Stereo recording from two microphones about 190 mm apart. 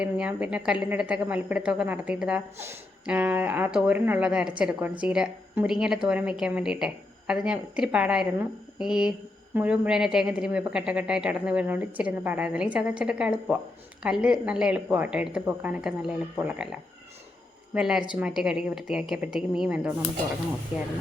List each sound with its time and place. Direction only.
0.0 s a woman's voice: 5° right (ahead or behind)
17.7 s speech: 5° right (ahead or behind)